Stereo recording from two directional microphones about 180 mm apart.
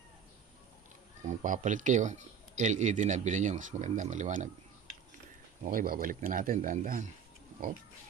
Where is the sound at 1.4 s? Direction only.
45° right (ahead or behind).